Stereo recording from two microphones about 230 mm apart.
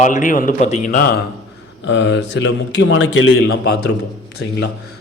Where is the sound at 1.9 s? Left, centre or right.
Left.